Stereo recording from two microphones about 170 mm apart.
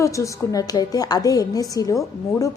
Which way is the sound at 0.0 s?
20° left (ahead or behind).